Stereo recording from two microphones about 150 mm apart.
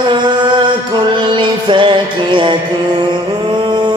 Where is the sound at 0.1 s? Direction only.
30° right (ahead or behind).